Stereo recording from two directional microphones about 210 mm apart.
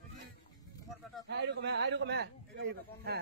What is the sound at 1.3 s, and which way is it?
A man's voice, 55° right (ahead or behind).